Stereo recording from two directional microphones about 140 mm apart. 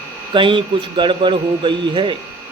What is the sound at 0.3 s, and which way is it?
Speech, 35° right (ahead or behind).